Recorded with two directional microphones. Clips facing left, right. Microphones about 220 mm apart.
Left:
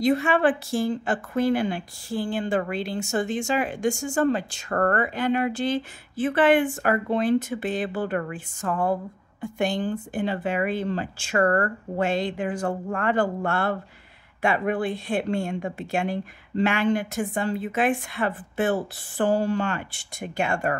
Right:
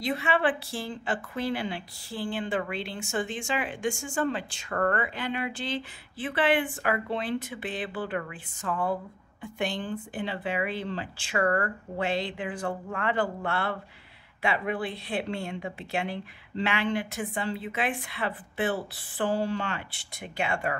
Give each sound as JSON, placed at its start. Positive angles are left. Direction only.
{"t": 0.0, "sound": "a woman's voice", "side_deg": 45}